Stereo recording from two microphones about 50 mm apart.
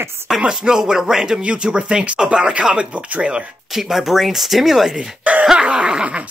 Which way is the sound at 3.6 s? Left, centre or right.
Centre.